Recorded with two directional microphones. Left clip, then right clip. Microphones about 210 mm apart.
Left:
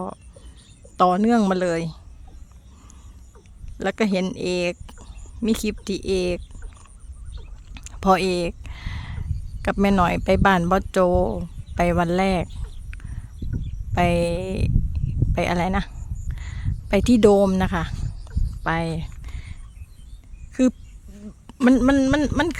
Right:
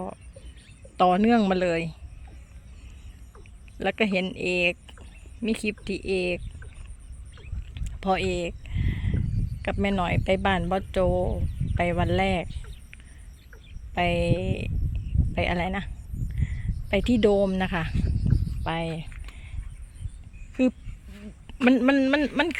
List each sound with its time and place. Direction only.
0.9 s speech: 15° left (ahead or behind)
3.8 s speech: 15° left (ahead or behind)
7.7 s speech: 30° left (ahead or behind)
13.9 s speech: 25° left (ahead or behind)
21.6 s speech: 15° left (ahead or behind)